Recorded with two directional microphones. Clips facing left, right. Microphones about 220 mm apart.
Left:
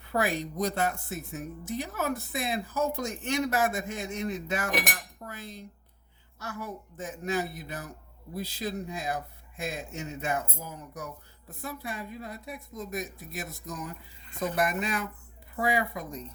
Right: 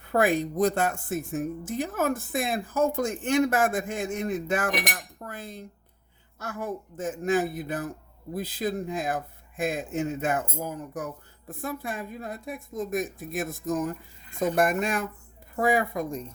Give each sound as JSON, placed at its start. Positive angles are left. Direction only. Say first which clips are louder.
{"t": 0.0, "sound": "a man's voice", "louder": "right 6 dB", "side_deg": -50}